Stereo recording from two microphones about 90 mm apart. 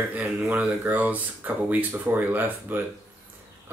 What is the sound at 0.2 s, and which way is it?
Speech, 20° right (ahead or behind).